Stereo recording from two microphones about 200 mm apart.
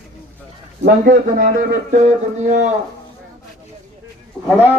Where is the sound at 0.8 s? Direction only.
45° right (ahead or behind).